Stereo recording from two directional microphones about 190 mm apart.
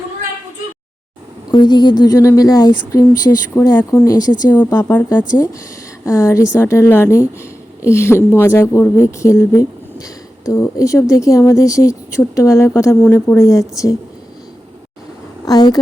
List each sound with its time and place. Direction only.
1.5 s a woman's voice: 20° left (ahead or behind)
15.4 s speech: 20° left (ahead or behind)